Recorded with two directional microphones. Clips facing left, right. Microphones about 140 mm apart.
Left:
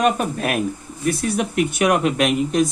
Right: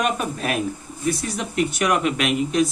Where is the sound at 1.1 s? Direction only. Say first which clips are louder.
Left 4 dB; 55° left (ahead or behind).